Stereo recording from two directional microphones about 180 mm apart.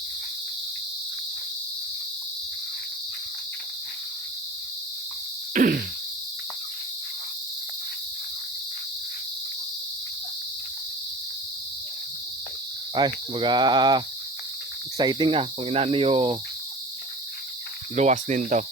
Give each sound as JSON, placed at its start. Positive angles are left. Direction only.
{"t": 5.5, "sound": "a sound", "side_deg": -55}
{"t": 12.9, "sound": "cricket", "side_deg": -25}
{"t": 17.9, "sound": "cricket", "side_deg": -40}